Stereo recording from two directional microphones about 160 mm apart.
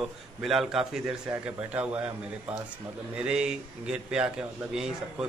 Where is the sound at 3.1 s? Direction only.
5° right (ahead or behind).